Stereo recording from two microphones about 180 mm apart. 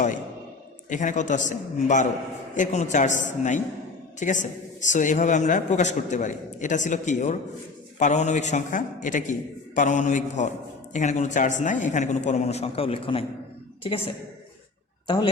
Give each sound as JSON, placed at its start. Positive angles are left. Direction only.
{"t": 0.9, "sound": "a man's voice", "side_deg": 45}
{"t": 15.0, "sound": "a man's voice", "side_deg": 25}